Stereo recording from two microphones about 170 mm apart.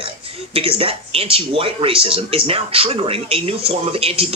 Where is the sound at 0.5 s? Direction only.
35° right (ahead or behind).